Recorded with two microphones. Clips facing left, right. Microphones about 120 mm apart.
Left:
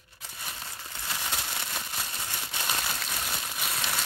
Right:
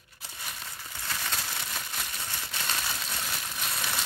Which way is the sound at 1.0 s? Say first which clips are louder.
Even; 15° left (ahead or behind).